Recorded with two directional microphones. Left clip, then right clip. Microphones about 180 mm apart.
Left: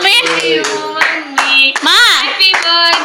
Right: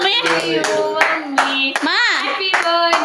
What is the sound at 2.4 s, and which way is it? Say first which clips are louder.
Hands: left 5 dB; 50° right (ahead or behind).